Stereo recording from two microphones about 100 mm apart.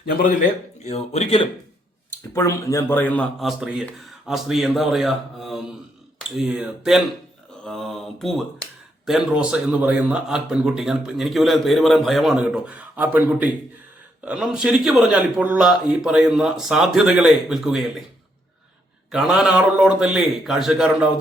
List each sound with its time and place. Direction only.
0.8 s speech: 90° left
2.3 s speech: 30° left (ahead or behind)
2.9 s a man's voice: 15° left (ahead or behind)
3.4 s a man's voice: 5° right (ahead or behind)
19.1 s a man's voice: 5° right (ahead or behind)